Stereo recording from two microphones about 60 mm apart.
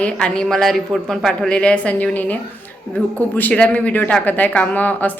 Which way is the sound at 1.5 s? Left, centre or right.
Centre.